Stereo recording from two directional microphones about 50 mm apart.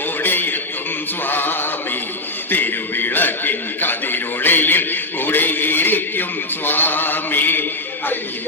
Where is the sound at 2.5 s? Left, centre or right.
Left.